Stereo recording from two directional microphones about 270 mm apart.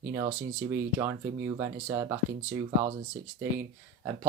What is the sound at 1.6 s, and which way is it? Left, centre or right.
Speech, centre.